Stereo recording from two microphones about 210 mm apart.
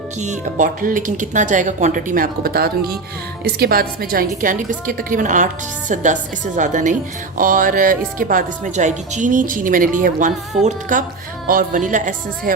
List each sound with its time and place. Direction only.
0.2 s speech: 35° right (ahead or behind)